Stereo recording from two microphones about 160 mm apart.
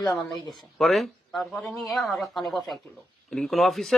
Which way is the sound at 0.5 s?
Centre (ahead or behind).